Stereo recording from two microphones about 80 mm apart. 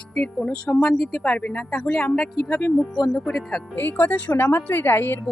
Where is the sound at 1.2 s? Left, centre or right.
Centre.